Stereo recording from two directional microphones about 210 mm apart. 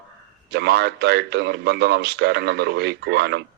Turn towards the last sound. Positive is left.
turn(degrees=-55)  # may be behind; listen again after turning